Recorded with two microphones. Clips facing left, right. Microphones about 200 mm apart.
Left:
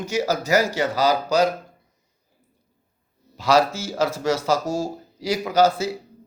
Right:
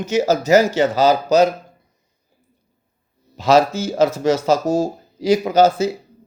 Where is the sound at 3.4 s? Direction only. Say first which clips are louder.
Right 4 dB; 20° right (ahead or behind).